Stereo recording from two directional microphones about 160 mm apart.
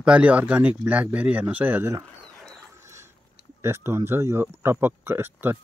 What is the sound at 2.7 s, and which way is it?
Mechanisms, 15° right (ahead or behind).